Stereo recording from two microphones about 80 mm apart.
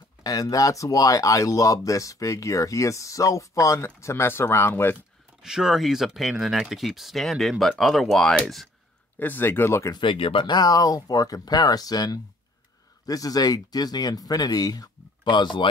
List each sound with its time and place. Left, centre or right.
0.2 s speech: left
5.4 s speech: centre
9.2 s speech: left
9.9 s speech: left